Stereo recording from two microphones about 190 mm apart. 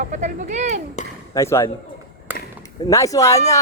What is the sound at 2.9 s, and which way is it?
Speech, 15° left (ahead or behind).